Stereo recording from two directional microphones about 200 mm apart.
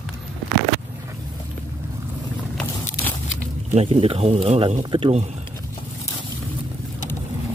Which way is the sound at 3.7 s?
30° right (ahead or behind).